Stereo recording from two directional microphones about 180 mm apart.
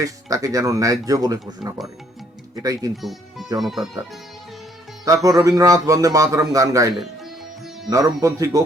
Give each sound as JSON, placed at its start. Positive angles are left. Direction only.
{"t": 0.0, "sound": "speech", "side_deg": -20}
{"t": 3.0, "sound": "speech", "side_deg": 0}
{"t": 5.0, "sound": "speech", "side_deg": -20}
{"t": 6.9, "sound": "music", "side_deg": 0}
{"t": 7.9, "sound": "speech", "side_deg": -20}